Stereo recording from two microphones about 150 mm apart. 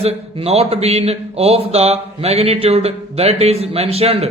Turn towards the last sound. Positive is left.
turn(degrees=-40)  # may be behind; listen again after turning